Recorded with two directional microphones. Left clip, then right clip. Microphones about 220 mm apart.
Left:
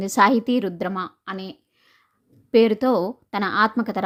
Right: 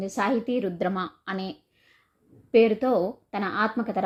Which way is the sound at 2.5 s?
40° left (ahead or behind).